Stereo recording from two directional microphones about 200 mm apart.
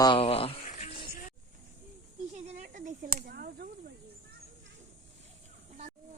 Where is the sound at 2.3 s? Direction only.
35° right (ahead or behind).